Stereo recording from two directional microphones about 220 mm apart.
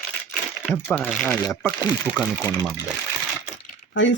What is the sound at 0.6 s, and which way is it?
Speech, centre (ahead or behind).